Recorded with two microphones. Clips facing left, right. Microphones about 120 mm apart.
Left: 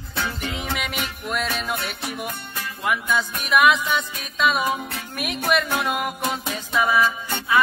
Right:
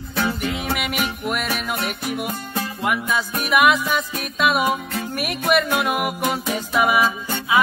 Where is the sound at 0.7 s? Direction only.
5° right (ahead or behind).